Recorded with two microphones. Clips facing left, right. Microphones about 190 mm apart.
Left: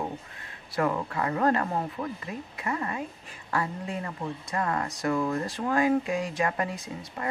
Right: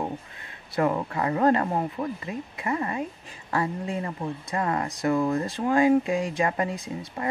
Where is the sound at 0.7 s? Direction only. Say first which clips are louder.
Right 3 dB; 25° right (ahead or behind).